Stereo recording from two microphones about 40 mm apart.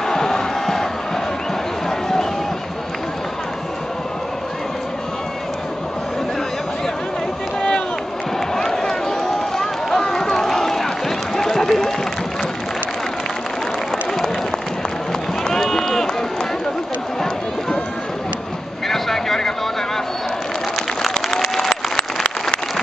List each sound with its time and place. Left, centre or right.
0.1 s crowd: centre
1.9 s a sound: centre
8.5 s run: centre
15.5 s run: centre
18.9 s vehicle: centre
21.3 s applause: centre